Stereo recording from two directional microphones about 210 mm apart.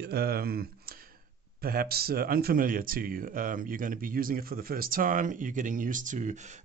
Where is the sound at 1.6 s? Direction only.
45° right (ahead or behind).